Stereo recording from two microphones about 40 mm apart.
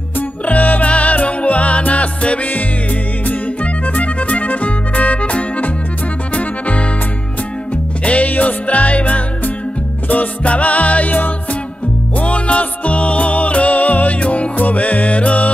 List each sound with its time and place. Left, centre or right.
0.5 s music: left
3.3 s music: left
12.2 s music: left